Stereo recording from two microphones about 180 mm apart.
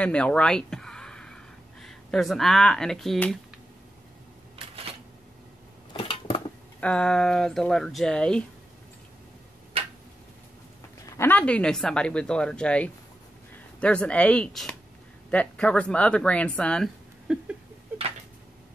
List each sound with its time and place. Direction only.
0.0 s a sound: 5° left (ahead or behind)
4.6 s camera: 35° right (ahead or behind)
5.9 s dishes: 30° left (ahead or behind)
6.8 s speech: 5° left (ahead or behind)
11.0 s speech: 15° left (ahead or behind); by 17.6 s centre (ahead or behind)